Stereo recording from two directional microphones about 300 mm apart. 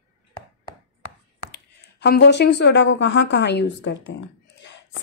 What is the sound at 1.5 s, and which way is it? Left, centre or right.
Speech, left.